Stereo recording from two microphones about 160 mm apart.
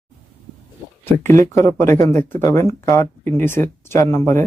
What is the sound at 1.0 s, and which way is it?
Speech, 15° left (ahead or behind).